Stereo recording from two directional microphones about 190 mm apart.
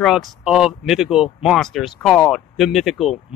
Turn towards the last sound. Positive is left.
turn(degrees=0)  # may be behind; listen again after turning